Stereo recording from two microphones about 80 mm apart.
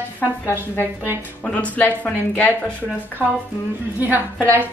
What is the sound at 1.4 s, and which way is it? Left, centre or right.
A woman's voice, centre.